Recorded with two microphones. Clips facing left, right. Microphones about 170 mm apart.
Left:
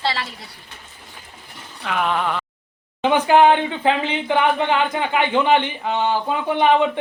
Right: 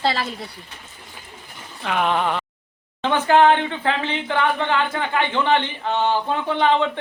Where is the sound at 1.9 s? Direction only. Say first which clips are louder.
Right 1 dB; centre (ahead or behind).